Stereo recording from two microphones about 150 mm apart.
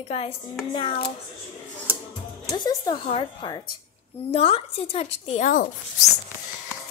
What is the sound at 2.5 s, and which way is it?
A woman's voice, 25° left (ahead or behind).